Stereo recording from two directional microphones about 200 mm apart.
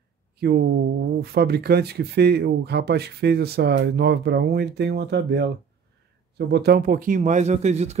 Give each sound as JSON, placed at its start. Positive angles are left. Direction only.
{"t": 0.4, "sound": "speech", "side_deg": -50}